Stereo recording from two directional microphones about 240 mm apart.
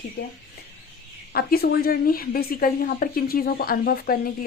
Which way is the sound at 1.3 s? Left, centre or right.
Left.